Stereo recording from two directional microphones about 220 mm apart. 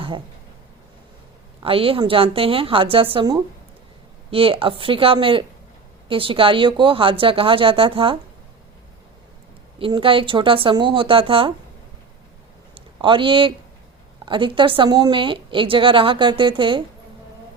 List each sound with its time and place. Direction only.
1.6 s a woman's voice: 25° right (ahead or behind)
9.7 s a woman's voice: 25° right (ahead or behind)
12.7 s a sound: 25° right (ahead or behind)
14.3 s a woman's voice: 20° right (ahead or behind)